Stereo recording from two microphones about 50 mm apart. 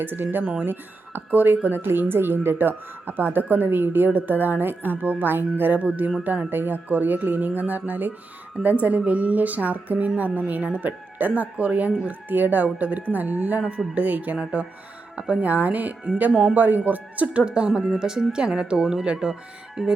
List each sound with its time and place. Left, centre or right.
0.0 s speech: right
13.6 s speech: right
16.3 s speech: centre
16.6 s speech: right
17.4 s speech: centre